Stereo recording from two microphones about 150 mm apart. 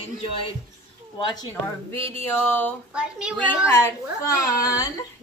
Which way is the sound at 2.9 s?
5° right (ahead or behind).